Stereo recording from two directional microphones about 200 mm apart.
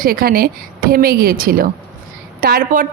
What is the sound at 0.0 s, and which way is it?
A woman's voice, 45° right (ahead or behind).